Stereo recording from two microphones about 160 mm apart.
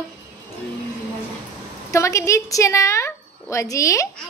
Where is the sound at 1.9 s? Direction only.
20° left (ahead or behind).